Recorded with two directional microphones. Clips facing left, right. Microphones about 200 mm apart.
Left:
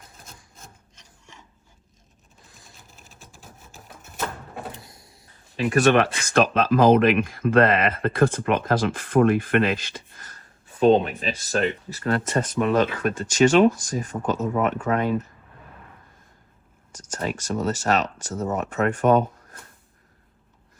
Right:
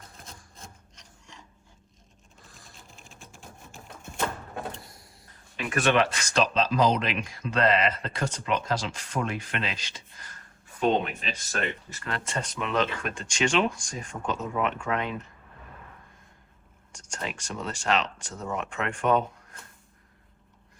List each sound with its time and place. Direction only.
0.1 s wood: centre (ahead or behind)
2.6 s a sound: 5° left (ahead or behind)
5.5 s speech: 35° left (ahead or behind)
5.9 s speech: 55° left (ahead or behind)
10.8 s speech: 35° left (ahead or behind)
17.1 s speech: 45° left (ahead or behind)